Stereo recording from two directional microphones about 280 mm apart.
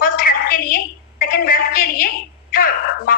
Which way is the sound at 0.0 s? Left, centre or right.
Left.